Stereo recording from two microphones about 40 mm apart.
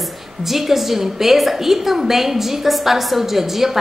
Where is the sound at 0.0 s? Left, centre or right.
Centre.